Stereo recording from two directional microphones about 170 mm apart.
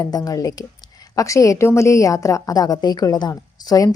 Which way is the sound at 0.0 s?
20° left (ahead or behind).